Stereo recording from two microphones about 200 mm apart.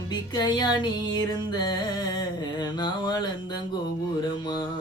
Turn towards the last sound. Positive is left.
turn(degrees=25)  # may be behind; listen again after turning